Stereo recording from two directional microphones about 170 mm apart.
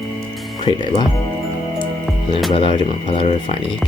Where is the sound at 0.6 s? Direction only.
25° left (ahead or behind).